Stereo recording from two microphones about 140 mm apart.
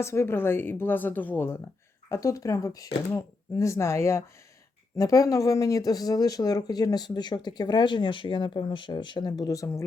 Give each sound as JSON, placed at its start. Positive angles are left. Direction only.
{"t": 0.0, "sound": "speech", "side_deg": 20}